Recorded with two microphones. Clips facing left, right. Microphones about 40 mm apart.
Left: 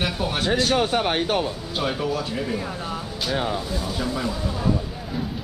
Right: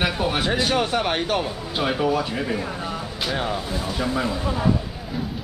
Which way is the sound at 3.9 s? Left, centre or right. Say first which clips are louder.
Right 5 dB; centre.